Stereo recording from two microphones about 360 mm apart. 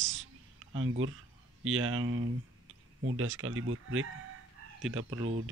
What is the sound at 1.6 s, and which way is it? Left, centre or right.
Speech, right.